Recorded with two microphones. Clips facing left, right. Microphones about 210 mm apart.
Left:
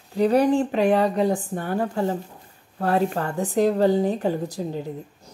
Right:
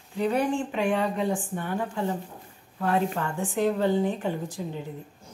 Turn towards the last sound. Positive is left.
turn(degrees=40)  # may be behind; listen again after turning